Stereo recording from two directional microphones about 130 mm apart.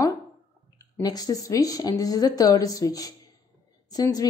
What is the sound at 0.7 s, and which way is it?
A woman's voice, 25° left (ahead or behind).